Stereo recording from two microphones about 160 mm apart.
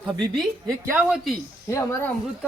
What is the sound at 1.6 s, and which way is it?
Speech, 20° left (ahead or behind).